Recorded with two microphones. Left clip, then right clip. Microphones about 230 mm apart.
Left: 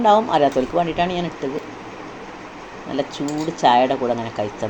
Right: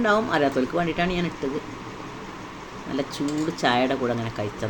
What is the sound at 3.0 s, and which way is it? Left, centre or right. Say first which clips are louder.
Speech: left 3 dB; centre.